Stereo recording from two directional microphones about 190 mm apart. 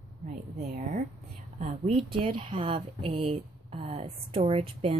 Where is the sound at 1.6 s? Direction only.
30° right (ahead or behind).